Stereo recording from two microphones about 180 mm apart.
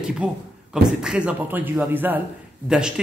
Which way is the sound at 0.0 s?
5° right (ahead or behind).